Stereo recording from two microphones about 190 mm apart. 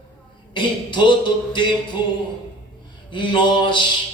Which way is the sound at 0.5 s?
25° left (ahead or behind).